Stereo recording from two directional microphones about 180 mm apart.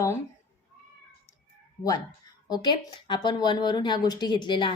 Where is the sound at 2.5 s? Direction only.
25° left (ahead or behind).